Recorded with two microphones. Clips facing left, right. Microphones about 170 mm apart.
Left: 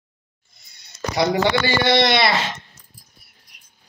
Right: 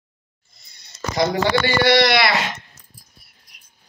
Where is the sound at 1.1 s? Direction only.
20° left (ahead or behind).